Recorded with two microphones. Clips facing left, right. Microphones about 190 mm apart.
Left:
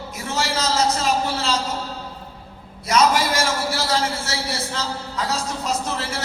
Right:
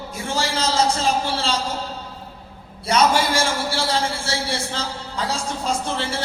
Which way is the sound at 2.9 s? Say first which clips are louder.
Even; 30° right (ahead or behind).